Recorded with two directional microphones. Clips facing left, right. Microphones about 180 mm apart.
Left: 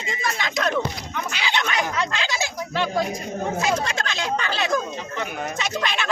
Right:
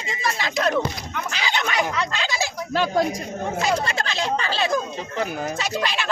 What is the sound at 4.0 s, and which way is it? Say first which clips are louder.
Speech: right 1 dB; 30° right (ahead or behind).